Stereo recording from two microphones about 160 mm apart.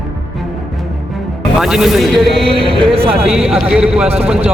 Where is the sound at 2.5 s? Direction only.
35° right (ahead or behind).